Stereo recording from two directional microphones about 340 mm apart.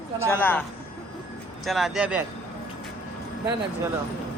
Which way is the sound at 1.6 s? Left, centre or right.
Centre.